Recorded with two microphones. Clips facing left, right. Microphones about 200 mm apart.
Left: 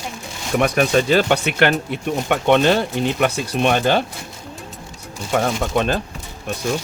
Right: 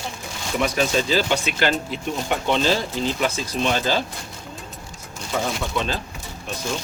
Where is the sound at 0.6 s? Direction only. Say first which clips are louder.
Left 5 dB; 60° left (ahead or behind).